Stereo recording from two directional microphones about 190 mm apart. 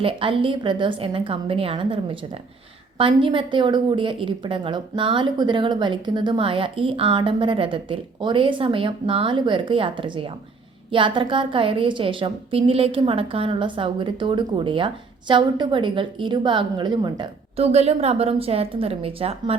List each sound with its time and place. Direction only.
0.0 s a woman's voice: 30° right (ahead or behind)